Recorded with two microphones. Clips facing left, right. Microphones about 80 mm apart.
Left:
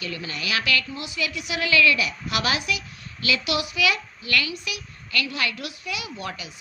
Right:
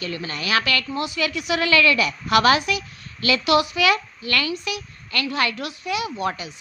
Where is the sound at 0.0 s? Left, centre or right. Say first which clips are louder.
Right 3 dB; right.